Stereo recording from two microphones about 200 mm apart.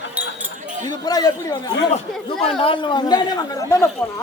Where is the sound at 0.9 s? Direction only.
20° left (ahead or behind).